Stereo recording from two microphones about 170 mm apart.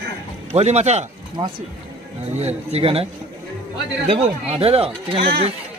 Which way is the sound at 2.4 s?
40° right (ahead or behind).